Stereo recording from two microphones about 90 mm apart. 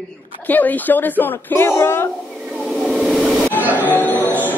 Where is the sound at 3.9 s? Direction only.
20° left (ahead or behind).